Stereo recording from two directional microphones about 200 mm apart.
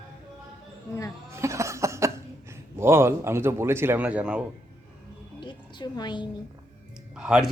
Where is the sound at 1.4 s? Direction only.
15° right (ahead or behind).